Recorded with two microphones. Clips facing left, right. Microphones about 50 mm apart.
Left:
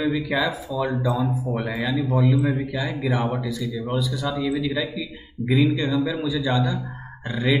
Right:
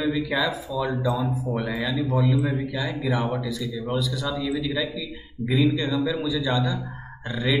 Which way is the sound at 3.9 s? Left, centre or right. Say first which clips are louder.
Left 1 dB; centre.